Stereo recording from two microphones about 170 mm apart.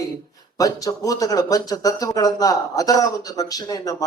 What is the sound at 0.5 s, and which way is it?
Speech, 20° left (ahead or behind).